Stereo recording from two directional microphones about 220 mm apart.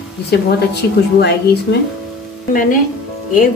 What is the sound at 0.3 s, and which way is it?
Speech, 50° left (ahead or behind).